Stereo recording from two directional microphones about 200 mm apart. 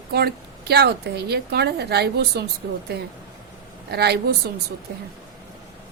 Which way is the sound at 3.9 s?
55° right (ahead or behind).